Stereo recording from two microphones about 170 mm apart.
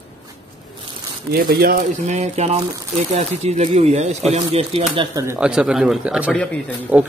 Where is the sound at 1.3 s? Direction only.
60° right (ahead or behind).